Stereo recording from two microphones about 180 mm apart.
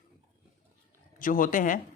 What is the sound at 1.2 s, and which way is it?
Speech, 50° left (ahead or behind).